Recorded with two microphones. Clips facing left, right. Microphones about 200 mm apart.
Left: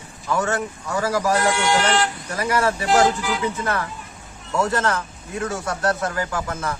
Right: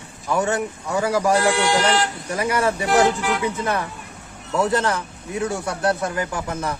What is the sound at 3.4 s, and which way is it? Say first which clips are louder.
Speech: right 1 dB; 15° right (ahead or behind).